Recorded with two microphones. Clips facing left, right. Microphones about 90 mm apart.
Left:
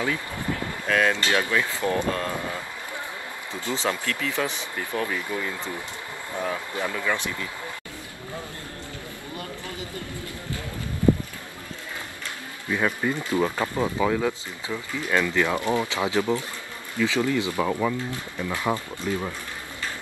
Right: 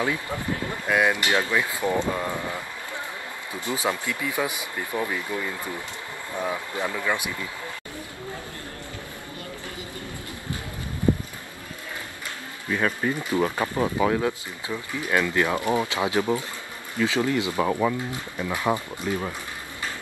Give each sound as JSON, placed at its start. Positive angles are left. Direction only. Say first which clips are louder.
{"t": 0.8, "sound": "speech", "louder": "even", "side_deg": -15}
{"t": 3.5, "sound": "speech", "louder": "even", "side_deg": -15}
{"t": 12.6, "sound": "speech", "louder": "even", "side_deg": 0}
{"t": 13.2, "sound": "speech", "louder": "even", "side_deg": -15}
{"t": 17.6, "sound": "speech", "louder": "right 1 dB", "side_deg": -5}